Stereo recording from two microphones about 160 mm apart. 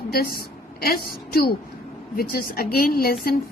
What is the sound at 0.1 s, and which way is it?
A woman's voice, 75° left (ahead or behind).